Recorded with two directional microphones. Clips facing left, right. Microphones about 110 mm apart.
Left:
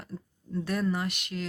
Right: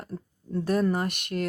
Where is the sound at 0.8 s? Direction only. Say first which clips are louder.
Right 3 dB; 50° right (ahead or behind).